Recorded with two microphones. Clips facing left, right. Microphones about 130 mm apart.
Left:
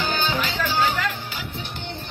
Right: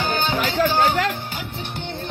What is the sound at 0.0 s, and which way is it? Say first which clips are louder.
Music: right 2 dB; 50° right (ahead or behind).